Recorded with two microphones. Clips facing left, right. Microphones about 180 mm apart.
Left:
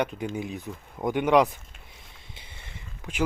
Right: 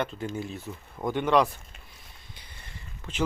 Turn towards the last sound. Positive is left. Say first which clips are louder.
# left 2 dB
turn(degrees=15)  # may be behind; listen again after turning